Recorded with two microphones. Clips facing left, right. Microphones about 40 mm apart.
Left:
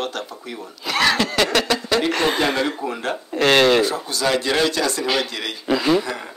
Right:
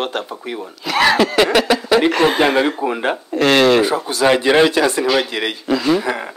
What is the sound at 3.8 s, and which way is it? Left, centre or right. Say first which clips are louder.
Speech: right 6 dB; centre.